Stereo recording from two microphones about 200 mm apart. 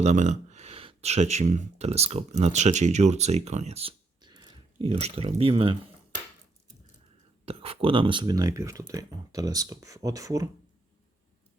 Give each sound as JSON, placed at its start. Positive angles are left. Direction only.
{"t": 0.0, "sound": "speech", "side_deg": -35}
{"t": 7.4, "sound": "speech", "side_deg": -30}